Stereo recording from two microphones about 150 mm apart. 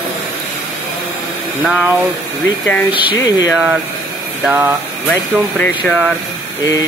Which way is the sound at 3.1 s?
25° left (ahead or behind).